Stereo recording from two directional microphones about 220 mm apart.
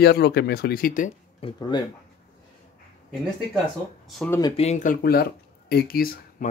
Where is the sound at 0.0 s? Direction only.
45° left (ahead or behind).